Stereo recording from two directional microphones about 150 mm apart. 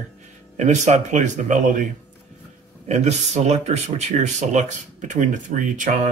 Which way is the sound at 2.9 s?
50° right (ahead or behind).